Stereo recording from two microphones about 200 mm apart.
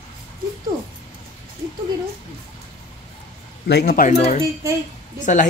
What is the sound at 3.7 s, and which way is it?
Speech, 50° left (ahead or behind).